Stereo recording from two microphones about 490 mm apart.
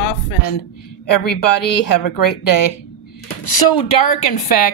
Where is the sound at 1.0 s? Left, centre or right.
Left.